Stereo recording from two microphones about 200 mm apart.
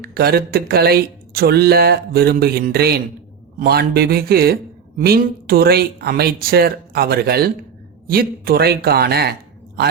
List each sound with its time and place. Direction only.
0.0 s a man's voice: 50° right (ahead or behind)